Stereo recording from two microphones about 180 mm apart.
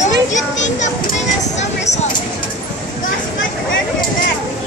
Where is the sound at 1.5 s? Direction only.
40° left (ahead or behind).